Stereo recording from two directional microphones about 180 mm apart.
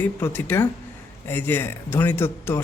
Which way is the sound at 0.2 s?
10° left (ahead or behind).